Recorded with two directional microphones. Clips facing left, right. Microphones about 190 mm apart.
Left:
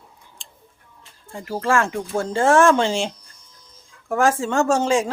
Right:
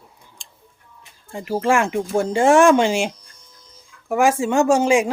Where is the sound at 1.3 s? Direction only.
20° right (ahead or behind).